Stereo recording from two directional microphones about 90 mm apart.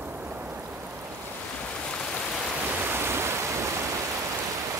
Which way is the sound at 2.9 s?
30° right (ahead or behind).